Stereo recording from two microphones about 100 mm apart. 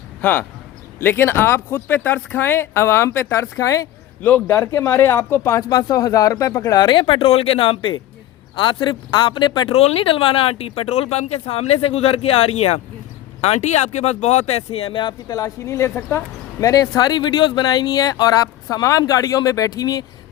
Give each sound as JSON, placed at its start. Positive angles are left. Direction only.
{"t": 0.2, "sound": "speech", "side_deg": 15}
{"t": 4.2, "sound": "speech", "side_deg": 15}
{"t": 9.6, "sound": "speech", "side_deg": 75}
{"t": 15.3, "sound": "speech", "side_deg": 35}